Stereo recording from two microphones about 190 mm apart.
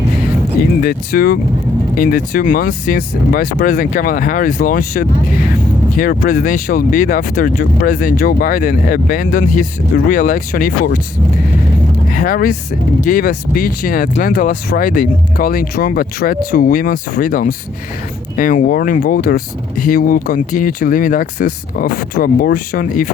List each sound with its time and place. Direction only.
0.8 s speech: 50° left (ahead or behind)
12.1 s speech: 50° left (ahead or behind)